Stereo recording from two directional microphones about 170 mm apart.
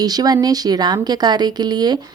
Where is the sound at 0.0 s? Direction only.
25° right (ahead or behind).